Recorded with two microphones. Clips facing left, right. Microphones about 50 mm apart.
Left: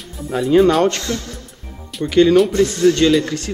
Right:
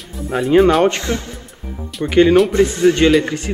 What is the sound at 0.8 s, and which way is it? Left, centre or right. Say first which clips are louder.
A man's voice: right 2 dB; right.